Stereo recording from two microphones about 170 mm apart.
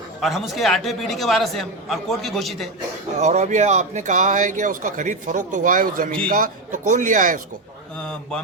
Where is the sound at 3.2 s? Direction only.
45° right (ahead or behind).